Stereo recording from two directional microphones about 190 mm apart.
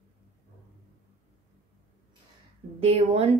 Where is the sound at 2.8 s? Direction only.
35° right (ahead or behind).